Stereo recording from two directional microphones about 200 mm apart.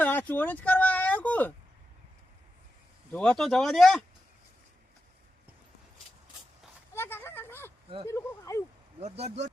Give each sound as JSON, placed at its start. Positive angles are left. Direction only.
{"t": 0.0, "sound": "speech", "side_deg": 10}
{"t": 3.1, "sound": "speech", "side_deg": 5}
{"t": 6.9, "sound": "a sound", "side_deg": 10}
{"t": 8.0, "sound": "speech", "side_deg": 15}
{"t": 9.0, "sound": "speech", "side_deg": -30}